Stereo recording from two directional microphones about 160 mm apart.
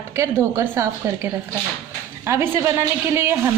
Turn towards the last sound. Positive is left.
turn(degrees=-15)  # may be behind; listen again after turning